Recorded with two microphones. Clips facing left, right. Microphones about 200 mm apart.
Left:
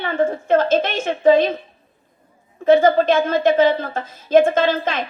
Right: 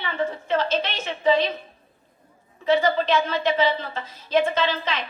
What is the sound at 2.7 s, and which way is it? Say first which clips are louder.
A woman's voice: left 7 dB; 50° left (ahead or behind).